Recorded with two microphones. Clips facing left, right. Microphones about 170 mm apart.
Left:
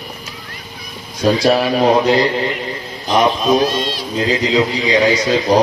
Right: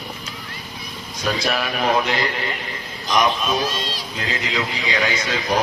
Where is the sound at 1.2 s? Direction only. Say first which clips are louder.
Left 10 dB; 30° left (ahead or behind).